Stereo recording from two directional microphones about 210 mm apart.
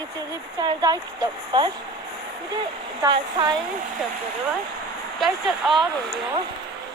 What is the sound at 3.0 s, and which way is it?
Speech, 20° right (ahead or behind).